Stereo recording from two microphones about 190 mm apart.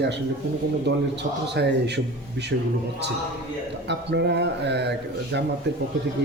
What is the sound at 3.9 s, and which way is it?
A man's voice, 65° right (ahead or behind).